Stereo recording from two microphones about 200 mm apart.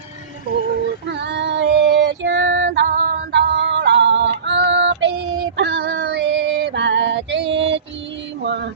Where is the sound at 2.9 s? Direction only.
50° right (ahead or behind); by 7.8 s 65° right (ahead or behind).